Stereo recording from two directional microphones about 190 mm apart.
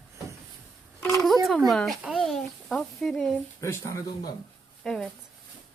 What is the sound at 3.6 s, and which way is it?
Speech, 15° left (ahead or behind).